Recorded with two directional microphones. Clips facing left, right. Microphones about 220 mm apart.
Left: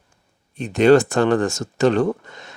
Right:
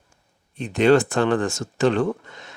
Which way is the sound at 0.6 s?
40° left (ahead or behind).